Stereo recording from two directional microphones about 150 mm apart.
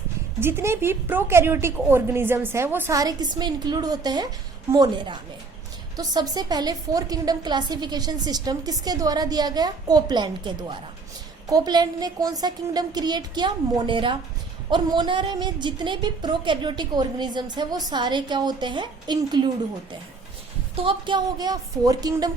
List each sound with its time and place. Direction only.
0.3 s a woman's voice: 15° right (ahead or behind)
20.8 s a woman's voice: 30° right (ahead or behind)